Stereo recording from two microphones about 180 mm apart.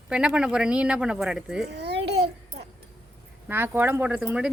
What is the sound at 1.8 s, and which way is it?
Babbling, 70° right (ahead or behind).